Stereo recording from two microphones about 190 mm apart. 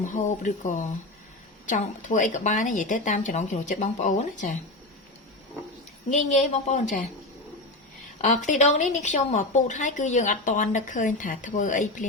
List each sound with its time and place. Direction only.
0.0 s a woman's voice: 40° left (ahead or behind)
6.1 s a woman's voice: 40° left (ahead or behind)
8.4 s a woman's voice: 40° left (ahead or behind)